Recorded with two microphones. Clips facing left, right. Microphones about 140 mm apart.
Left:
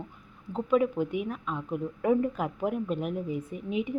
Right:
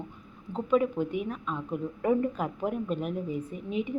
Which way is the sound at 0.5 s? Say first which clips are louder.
Even; 5° left (ahead or behind).